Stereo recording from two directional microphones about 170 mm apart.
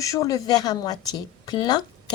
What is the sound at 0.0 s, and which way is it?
A woman's voice, 20° left (ahead or behind).